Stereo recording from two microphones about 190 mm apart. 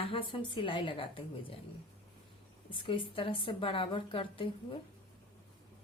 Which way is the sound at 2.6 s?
25° left (ahead or behind).